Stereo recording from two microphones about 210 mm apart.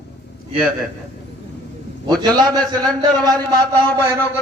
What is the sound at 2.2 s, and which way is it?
A man's voice, 20° right (ahead or behind).